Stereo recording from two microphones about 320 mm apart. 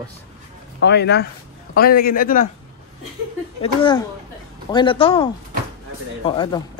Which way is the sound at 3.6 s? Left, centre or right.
Centre.